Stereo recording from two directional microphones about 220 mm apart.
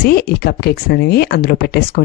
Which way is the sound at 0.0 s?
45° left (ahead or behind).